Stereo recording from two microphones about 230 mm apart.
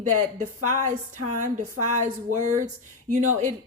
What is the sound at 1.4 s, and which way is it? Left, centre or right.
Speech, right.